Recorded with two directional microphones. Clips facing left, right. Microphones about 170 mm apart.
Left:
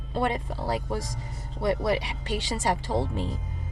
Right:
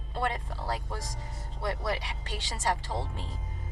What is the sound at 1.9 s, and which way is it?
Speech, 15° left (ahead or behind).